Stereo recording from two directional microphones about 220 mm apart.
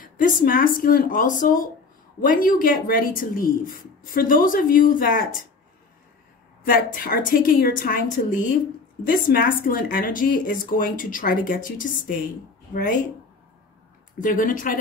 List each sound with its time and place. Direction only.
0.0 s a woman's voice: 40° left (ahead or behind)
6.6 s a woman's voice: 40° left (ahead or behind)
14.2 s a woman's voice: 40° left (ahead or behind)